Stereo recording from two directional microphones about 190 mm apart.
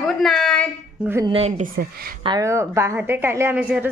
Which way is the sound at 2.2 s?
20° right (ahead or behind).